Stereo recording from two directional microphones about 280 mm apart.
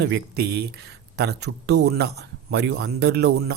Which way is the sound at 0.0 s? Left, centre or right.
Right.